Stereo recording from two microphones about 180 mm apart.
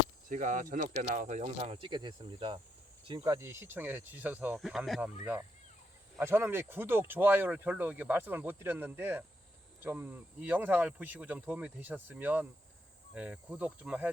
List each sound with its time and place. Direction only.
0.3 s speech: 45° right (ahead or behind); by 5.1 s 5° right (ahead or behind)
6.1 s speech: 15° right (ahead or behind)